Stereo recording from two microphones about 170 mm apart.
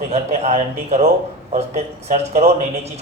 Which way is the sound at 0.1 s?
40° right (ahead or behind).